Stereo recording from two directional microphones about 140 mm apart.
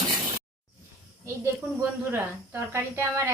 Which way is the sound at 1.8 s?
15° right (ahead or behind).